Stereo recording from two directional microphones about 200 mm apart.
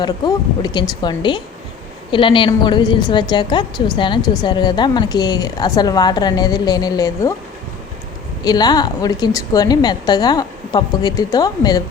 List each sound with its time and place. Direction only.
0.0 s a woman's voice: 20° left (ahead or behind)
8.4 s a woman's voice: 20° left (ahead or behind)